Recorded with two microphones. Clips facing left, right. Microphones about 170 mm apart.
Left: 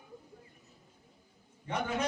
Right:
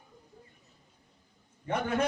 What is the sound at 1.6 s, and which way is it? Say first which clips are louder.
Speech: right 4 dB; 55° right (ahead or behind).